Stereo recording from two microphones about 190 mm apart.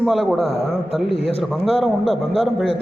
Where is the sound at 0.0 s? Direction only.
Centre (ahead or behind).